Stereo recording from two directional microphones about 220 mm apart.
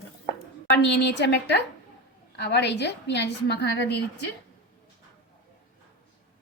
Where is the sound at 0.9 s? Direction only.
50° left (ahead or behind).